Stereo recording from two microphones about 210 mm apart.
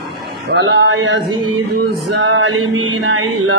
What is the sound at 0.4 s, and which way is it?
Male singing, 55° right (ahead or behind).